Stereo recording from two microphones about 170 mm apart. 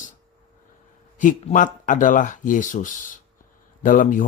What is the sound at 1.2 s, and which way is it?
Speech, 50° left (ahead or behind).